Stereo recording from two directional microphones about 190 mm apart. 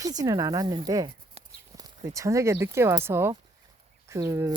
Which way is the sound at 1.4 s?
30° right (ahead or behind).